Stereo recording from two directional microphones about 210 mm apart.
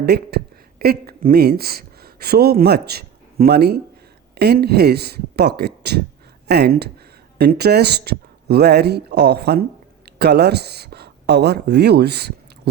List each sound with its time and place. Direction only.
0.0 s speech: 50° right (ahead or behind)